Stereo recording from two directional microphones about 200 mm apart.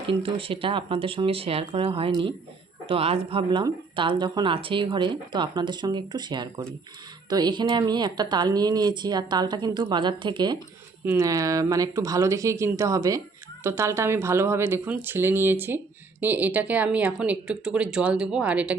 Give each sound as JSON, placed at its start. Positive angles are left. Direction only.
{"t": 0.1, "sound": "speech", "side_deg": -25}